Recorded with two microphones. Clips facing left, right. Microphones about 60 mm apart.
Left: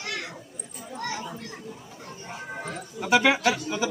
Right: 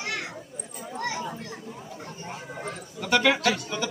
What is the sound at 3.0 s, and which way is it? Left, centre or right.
Speech, centre.